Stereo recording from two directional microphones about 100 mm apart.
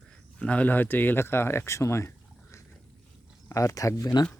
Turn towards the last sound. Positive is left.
turn(degrees=40)  # may be behind; listen again after turning